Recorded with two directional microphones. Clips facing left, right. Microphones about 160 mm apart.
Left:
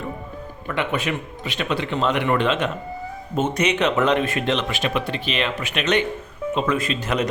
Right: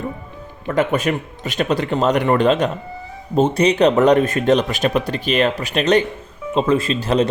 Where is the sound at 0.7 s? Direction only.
40° right (ahead or behind).